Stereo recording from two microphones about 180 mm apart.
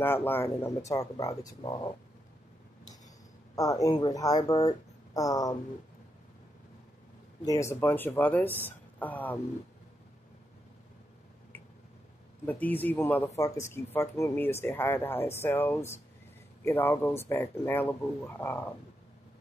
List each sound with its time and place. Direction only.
0.0 s speech: 10° left (ahead or behind)
3.5 s speech: 20° left (ahead or behind)
7.4 s speech: 15° left (ahead or behind)
12.4 s speech: 10° left (ahead or behind)